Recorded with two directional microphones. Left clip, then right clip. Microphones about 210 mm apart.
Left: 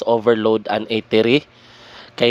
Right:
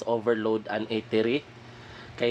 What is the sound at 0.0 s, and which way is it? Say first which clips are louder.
Speech: left 10 dB; 35° left (ahead or behind).